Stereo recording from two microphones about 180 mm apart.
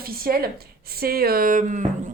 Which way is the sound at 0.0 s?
55° right (ahead or behind).